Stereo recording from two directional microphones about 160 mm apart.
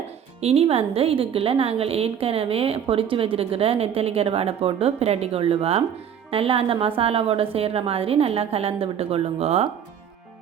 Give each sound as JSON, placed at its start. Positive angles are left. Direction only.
{"t": 0.4, "sound": "a woman's voice", "side_deg": -40}